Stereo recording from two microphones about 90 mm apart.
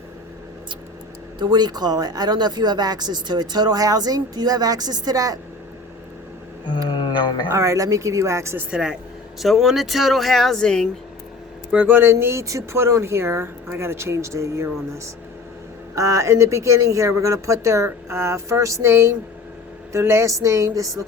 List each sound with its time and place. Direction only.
1.4 s speech: 55° right (ahead or behind)
6.8 s a sound: 65° left (ahead or behind)
7.5 s speech: 40° right (ahead or behind)
8.7 s speech: 10° right (ahead or behind); by 10.8 s 10° left (ahead or behind)
11.7 s speech: 20° right (ahead or behind); by 14.7 s 35° right (ahead or behind)
16.0 s speech: 35° right (ahead or behind)